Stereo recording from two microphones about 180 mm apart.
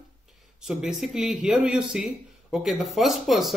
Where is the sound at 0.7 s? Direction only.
5° right (ahead or behind).